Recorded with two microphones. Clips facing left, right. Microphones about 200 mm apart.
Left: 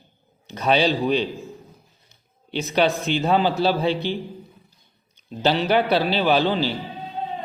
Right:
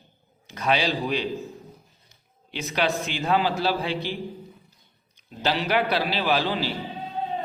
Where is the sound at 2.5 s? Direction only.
30° left (ahead or behind).